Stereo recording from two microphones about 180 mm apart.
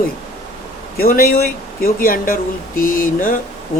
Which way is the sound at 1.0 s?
55° left (ahead or behind).